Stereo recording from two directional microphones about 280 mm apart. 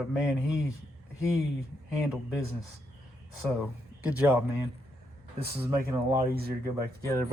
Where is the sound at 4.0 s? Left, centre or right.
Centre.